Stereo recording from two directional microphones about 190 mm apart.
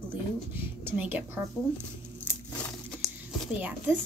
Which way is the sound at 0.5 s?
10° right (ahead or behind).